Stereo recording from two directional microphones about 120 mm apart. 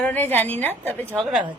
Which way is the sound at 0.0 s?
15° left (ahead or behind).